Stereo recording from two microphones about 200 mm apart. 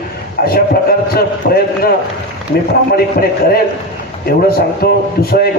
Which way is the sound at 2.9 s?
50° left (ahead or behind).